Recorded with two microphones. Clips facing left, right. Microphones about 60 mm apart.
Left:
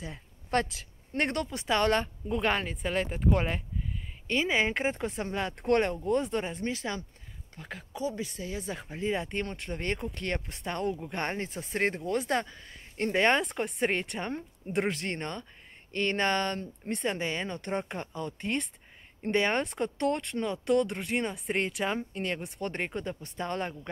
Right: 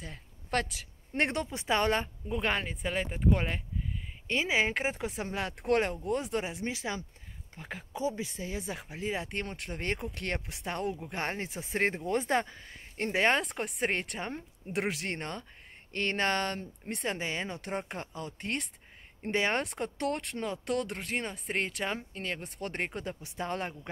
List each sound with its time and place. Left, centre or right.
0.5 s speech: centre
1.1 s speech: centre
2.2 s speech: centre